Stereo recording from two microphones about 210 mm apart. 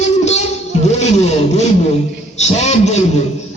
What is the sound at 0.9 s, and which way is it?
Vehicle, 30° left (ahead or behind).